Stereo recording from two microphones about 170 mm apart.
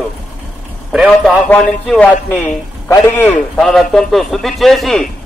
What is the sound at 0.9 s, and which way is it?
Speech, centre (ahead or behind).